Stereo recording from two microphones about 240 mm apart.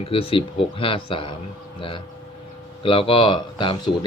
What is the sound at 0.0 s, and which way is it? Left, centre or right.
Speech, left.